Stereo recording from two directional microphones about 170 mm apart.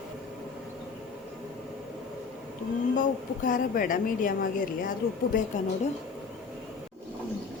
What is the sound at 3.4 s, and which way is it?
Speech, 50° left (ahead or behind).